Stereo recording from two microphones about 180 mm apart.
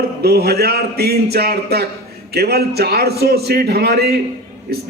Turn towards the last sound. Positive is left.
turn(degrees=-60)  # may be behind; listen again after turning